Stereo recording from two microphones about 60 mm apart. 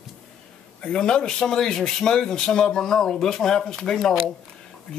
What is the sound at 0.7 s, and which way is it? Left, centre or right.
Speech, centre.